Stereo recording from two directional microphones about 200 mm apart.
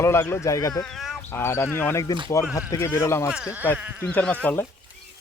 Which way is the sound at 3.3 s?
5° right (ahead or behind).